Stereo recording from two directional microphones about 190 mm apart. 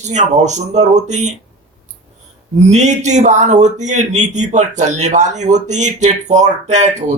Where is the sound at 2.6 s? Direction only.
40° right (ahead or behind).